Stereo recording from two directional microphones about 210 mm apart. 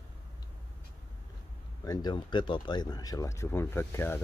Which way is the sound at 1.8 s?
20° left (ahead or behind).